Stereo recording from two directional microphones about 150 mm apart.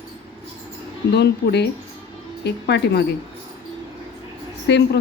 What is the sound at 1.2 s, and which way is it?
Speech, 90° left.